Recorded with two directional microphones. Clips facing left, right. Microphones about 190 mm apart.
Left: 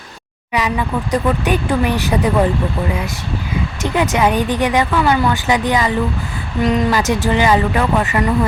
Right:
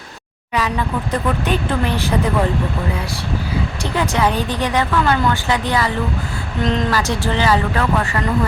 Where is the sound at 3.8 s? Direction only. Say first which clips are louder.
Left 3 dB; 15° left (ahead or behind).